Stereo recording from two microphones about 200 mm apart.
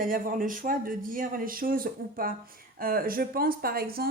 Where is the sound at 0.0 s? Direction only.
45° right (ahead or behind).